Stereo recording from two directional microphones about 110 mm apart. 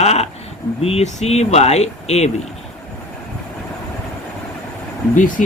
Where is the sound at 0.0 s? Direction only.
80° left.